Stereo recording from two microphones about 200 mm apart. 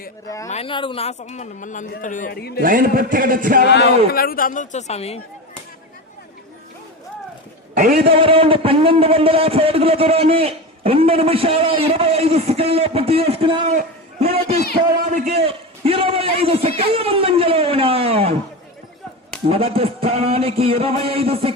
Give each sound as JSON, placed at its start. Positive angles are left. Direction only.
{"t": 0.4, "sound": "speech", "side_deg": 30}
{"t": 2.6, "sound": "a man's voice", "side_deg": -45}
{"t": 3.7, "sound": "speech", "side_deg": 55}
{"t": 7.8, "sound": "a man's voice", "side_deg": -45}
{"t": 8.1, "sound": "a man's voice", "side_deg": -25}
{"t": 13.7, "sound": "a sound", "side_deg": -30}
{"t": 14.9, "sound": "a man's voice", "side_deg": -45}
{"t": 15.4, "sound": "a man's voice", "side_deg": -30}
{"t": 19.5, "sound": "a man's voice", "side_deg": -30}